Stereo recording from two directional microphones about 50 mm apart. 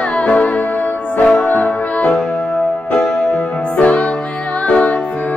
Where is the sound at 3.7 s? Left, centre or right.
Left.